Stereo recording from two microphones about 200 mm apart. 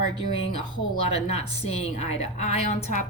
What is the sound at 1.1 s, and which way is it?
A woman's voice, 30° left (ahead or behind).